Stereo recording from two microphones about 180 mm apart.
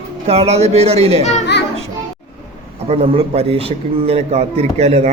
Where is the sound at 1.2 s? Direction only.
40° left (ahead or behind).